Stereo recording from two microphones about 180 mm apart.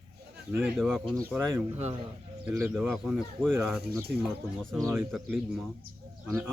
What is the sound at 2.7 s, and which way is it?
Speech, centre (ahead or behind).